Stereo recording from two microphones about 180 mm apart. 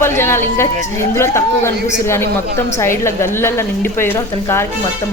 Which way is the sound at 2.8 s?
15° left (ahead or behind).